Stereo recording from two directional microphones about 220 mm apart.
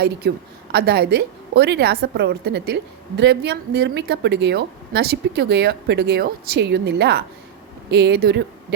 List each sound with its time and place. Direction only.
0.0 s a woman's voice: 45° right (ahead or behind)